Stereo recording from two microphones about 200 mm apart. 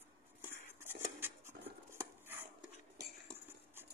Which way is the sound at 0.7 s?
15° right (ahead or behind).